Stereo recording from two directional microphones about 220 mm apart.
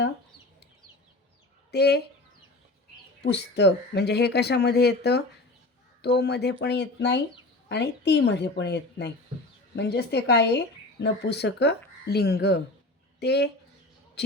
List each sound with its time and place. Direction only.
1.7 s speech: 50° left (ahead or behind)
3.2 s speech: 50° left (ahead or behind)